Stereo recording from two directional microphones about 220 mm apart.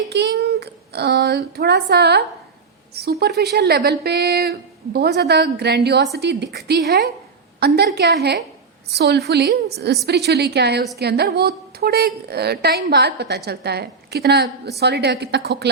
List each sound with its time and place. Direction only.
0.1 s a woman's voice: 50° right (ahead or behind)